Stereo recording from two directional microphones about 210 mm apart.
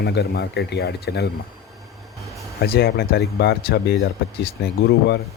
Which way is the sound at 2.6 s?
50° left (ahead or behind).